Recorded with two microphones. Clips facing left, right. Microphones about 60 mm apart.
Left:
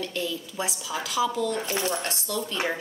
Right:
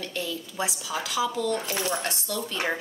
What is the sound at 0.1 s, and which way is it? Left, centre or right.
Speech, centre.